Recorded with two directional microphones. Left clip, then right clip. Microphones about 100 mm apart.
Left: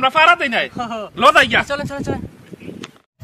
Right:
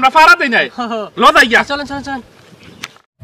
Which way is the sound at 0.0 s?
20° left (ahead or behind).